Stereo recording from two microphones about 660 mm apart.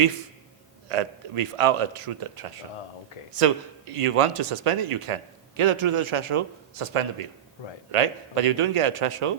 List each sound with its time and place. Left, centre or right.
0.9 s a man's voice: right